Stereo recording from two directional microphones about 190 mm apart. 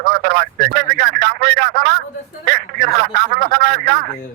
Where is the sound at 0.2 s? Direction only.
60° right (ahead or behind).